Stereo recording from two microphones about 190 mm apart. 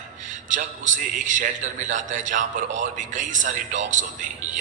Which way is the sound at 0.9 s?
40° right (ahead or behind).